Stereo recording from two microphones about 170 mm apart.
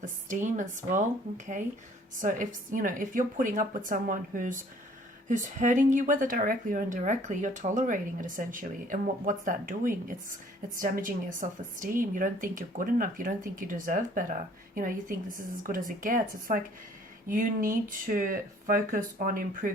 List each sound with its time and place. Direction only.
0.0 s speech: 45° right (ahead or behind)
2.2 s speech: 50° right (ahead or behind)